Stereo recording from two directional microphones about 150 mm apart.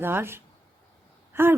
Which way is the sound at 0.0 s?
15° right (ahead or behind).